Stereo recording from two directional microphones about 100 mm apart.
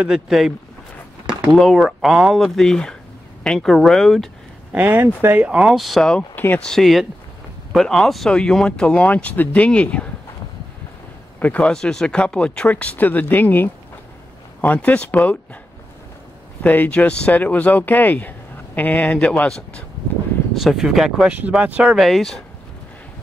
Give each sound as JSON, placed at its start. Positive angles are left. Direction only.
{"t": 0.0, "sound": "speech", "side_deg": -5}
{"t": 1.5, "sound": "speech", "side_deg": 0}
{"t": 4.7, "sound": "speech", "side_deg": -20}
{"t": 6.3, "sound": "speech", "side_deg": 20}
{"t": 6.6, "sound": "speech", "side_deg": 5}
{"t": 11.3, "sound": "speech", "side_deg": 15}
{"t": 16.6, "sound": "speech", "side_deg": 15}
{"t": 20.5, "sound": "speech", "side_deg": -5}
{"t": 21.3, "sound": "speech", "side_deg": -15}
{"t": 21.9, "sound": "speech", "side_deg": 0}